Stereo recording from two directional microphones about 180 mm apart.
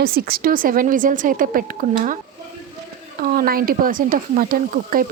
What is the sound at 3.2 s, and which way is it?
A woman's voice, 55° right (ahead or behind).